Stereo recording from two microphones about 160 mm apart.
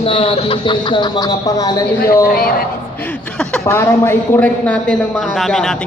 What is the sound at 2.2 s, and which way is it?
Speech, 70° left (ahead or behind).